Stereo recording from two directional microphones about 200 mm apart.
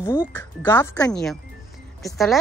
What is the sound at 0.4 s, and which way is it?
A woman's voice, 10° left (ahead or behind).